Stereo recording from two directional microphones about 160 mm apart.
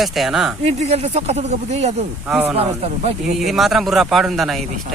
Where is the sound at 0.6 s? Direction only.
40° right (ahead or behind).